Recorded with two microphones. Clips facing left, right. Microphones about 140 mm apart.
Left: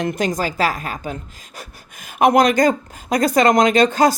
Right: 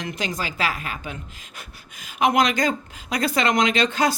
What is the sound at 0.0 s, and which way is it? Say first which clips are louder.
A woman's voice: left 8 dB; 45° left (ahead or behind).